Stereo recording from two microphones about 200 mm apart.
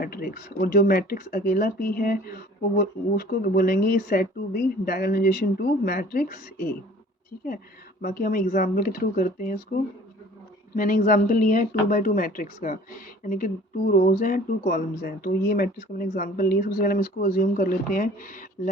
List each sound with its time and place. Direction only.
0.0 s speech: 45° left (ahead or behind)
8.0 s speech: 45° left (ahead or behind)